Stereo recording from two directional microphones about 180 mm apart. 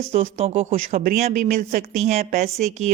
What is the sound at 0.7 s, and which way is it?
Speech, 45° right (ahead or behind).